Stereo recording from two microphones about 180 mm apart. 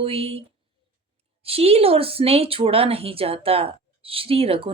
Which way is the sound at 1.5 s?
35° right (ahead or behind).